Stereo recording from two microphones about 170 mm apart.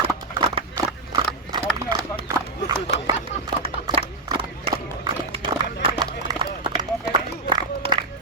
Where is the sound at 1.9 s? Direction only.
25° right (ahead or behind).